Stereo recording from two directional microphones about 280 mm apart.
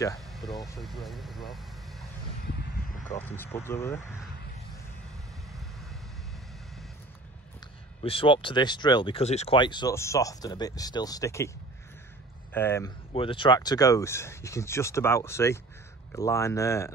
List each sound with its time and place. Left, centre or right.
0.3 s speech: centre
3.1 s speech: centre
8.0 s speech: centre
12.5 s speech: centre
13.1 s speech: centre